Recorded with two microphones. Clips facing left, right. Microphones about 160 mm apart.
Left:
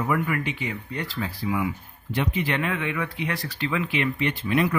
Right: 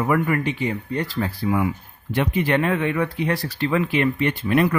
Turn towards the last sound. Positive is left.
turn(degrees=-55)  # may be behind; listen again after turning